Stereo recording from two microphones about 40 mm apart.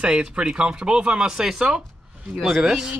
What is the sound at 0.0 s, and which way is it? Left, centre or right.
Speech, right.